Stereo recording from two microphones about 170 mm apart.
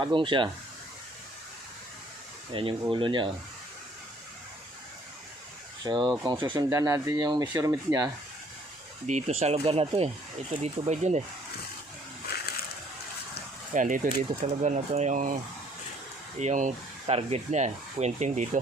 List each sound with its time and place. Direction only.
0.0 s speech: 30° right (ahead or behind)
2.5 s speech: 30° right (ahead or behind)
5.8 s speech: 25° right (ahead or behind)
9.0 s speech: 45° right (ahead or behind)
13.7 s speech: 50° right (ahead or behind)
16.4 s speech: 45° right (ahead or behind)